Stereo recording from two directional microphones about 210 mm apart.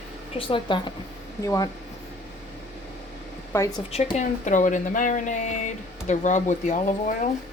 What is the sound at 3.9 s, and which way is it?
Speech, 35° left (ahead or behind).